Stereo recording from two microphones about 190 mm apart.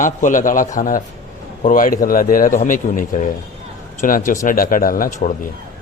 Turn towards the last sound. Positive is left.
turn(degrees=45)  # may be behind; listen again after turning